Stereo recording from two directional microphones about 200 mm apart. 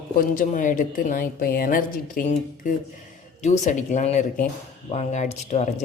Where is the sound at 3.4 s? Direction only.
35° left (ahead or behind).